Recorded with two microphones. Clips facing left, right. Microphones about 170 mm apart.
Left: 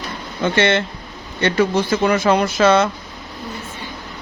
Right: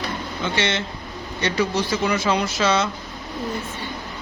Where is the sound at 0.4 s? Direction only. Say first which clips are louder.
Left 8 dB; 55° left (ahead or behind).